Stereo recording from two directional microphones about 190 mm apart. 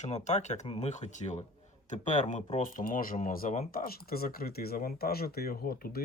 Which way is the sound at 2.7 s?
45° left (ahead or behind).